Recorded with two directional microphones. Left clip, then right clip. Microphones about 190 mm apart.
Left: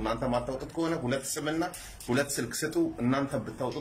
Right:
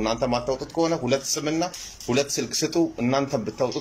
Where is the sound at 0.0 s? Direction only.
15° right (ahead or behind).